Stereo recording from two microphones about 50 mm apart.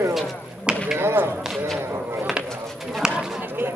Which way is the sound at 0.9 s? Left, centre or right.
Right.